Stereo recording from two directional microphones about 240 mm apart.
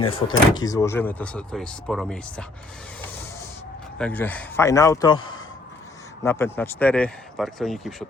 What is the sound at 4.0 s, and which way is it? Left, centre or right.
Speech, centre.